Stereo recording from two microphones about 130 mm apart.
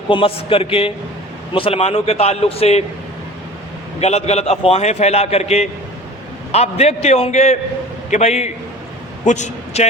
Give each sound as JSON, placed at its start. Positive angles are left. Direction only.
{"t": 0.1, "sound": "a man's voice", "side_deg": 45}
{"t": 4.0, "sound": "a man's voice", "side_deg": 55}
{"t": 9.2, "sound": "a woman's voice", "side_deg": 65}